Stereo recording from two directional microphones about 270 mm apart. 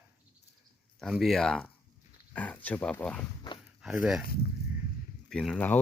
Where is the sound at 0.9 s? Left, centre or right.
Centre.